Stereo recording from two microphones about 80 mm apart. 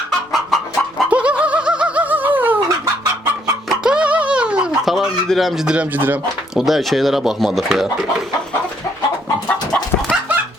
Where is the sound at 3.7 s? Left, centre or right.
Centre.